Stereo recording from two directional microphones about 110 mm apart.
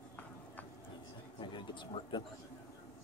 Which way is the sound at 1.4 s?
45° left (ahead or behind).